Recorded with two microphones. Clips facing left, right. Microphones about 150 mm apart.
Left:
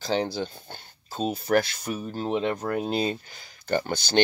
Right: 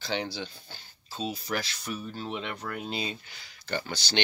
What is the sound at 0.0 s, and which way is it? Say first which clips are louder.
Speech: left 6 dB; 40° left (ahead or behind).